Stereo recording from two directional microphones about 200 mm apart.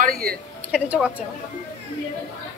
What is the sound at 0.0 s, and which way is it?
Speech, 50° right (ahead or behind).